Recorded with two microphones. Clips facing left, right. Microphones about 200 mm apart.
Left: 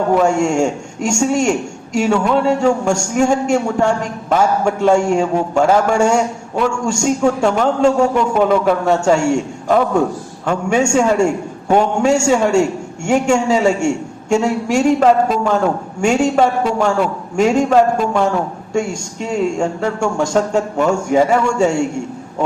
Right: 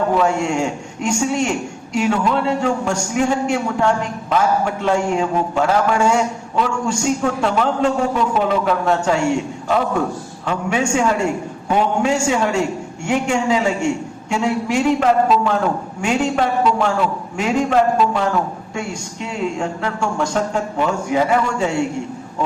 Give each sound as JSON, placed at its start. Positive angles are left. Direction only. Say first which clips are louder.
{"t": 0.2, "sound": "a man's voice", "louder": "left 4 dB", "side_deg": 45}